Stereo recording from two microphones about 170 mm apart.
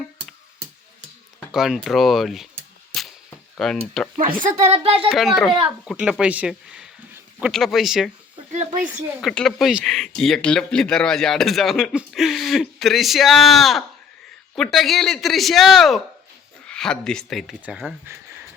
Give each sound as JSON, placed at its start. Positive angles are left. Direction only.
{"t": 1.5, "sound": "speech", "side_deg": 0}
{"t": 2.9, "sound": "a sound", "side_deg": 0}
{"t": 3.6, "sound": "speech", "side_deg": 5}
{"t": 4.2, "sound": "a woman's voice", "side_deg": -50}
{"t": 5.0, "sound": "speech", "side_deg": 0}
{"t": 8.5, "sound": "speech", "side_deg": -50}
{"t": 8.9, "sound": "speech", "side_deg": 0}